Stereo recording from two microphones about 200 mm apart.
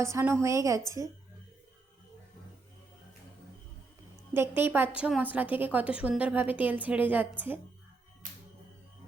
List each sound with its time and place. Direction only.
0.0 s a woman's voice: 15° right (ahead or behind)
4.4 s a woman's voice: 10° right (ahead or behind)